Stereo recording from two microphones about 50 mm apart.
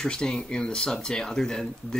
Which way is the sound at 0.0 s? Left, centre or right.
Centre.